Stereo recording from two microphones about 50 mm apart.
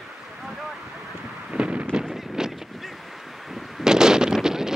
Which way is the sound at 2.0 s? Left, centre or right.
Centre.